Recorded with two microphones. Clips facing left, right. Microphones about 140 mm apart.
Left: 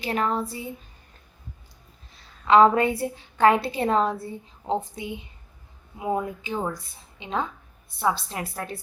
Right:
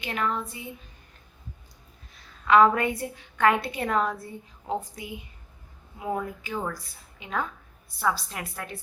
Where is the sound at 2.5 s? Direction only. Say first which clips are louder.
Left 3 dB; 25° left (ahead or behind).